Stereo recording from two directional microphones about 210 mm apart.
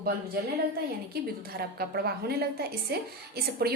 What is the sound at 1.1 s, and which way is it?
A woman's voice, 50° right (ahead or behind).